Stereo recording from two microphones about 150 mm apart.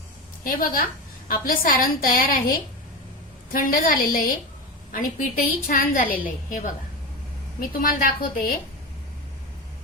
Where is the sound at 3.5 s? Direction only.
65° left (ahead or behind).